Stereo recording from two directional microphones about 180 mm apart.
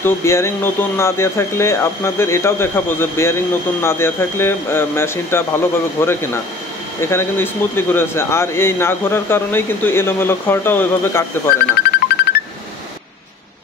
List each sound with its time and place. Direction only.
0.0 s speech: 15° left (ahead or behind)
11.8 s music: 60° left (ahead or behind)